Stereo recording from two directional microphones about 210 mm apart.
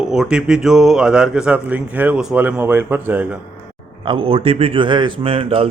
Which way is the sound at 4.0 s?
25° right (ahead or behind).